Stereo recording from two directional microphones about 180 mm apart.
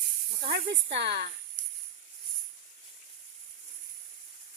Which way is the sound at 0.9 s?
70° right (ahead or behind).